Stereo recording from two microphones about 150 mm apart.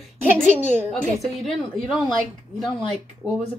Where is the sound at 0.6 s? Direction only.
15° right (ahead or behind).